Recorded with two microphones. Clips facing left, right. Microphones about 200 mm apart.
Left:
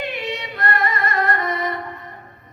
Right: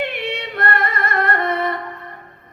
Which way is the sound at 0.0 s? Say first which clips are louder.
Right 2 dB; 55° right (ahead or behind).